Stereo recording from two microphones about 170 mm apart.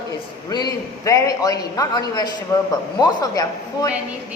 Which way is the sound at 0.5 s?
20° left (ahead or behind).